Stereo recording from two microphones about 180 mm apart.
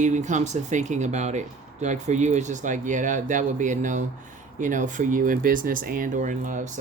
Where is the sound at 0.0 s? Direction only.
40° right (ahead or behind).